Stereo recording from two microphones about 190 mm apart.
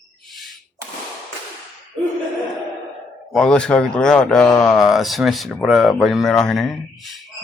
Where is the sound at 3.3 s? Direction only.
5° left (ahead or behind).